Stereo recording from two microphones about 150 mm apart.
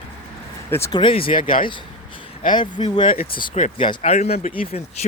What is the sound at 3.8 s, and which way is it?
Speech, 35° left (ahead or behind).